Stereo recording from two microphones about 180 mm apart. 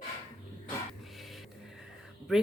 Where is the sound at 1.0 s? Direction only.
Centre (ahead or behind).